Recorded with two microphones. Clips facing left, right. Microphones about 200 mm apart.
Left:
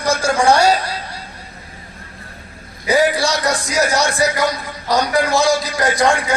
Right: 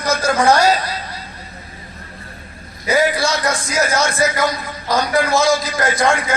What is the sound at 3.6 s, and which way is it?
A man's voice, 15° left (ahead or behind).